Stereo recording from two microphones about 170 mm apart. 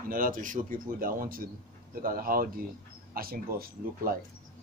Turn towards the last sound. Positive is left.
turn(degrees=-60)  # may be behind; listen again after turning